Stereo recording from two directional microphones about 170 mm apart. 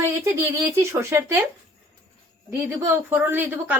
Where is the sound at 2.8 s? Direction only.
10° right (ahead or behind).